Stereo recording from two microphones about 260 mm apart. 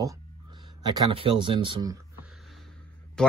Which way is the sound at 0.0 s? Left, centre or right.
Centre.